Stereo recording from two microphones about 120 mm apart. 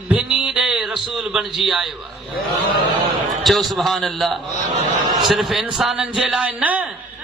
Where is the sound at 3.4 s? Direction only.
Centre (ahead or behind).